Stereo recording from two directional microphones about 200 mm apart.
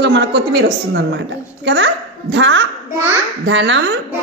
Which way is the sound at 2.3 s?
65° right (ahead or behind).